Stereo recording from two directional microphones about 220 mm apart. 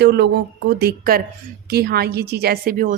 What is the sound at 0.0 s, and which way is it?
A woman's voice, 50° right (ahead or behind).